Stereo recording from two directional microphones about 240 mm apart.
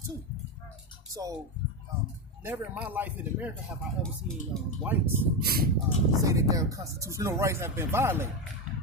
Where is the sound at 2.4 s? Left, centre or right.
Centre.